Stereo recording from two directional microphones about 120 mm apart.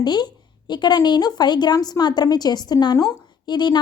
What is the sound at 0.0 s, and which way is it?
A woman's voice, 35° left (ahead or behind).